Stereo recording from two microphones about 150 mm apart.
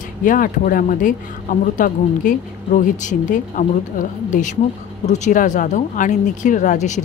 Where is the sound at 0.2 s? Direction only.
65° left (ahead or behind).